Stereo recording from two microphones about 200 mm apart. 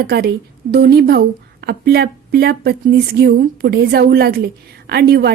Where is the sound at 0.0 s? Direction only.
50° right (ahead or behind).